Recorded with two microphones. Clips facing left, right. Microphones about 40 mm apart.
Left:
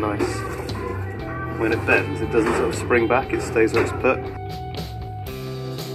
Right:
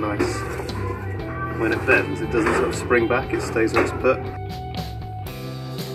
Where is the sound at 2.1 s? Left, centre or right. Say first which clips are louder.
Even; left.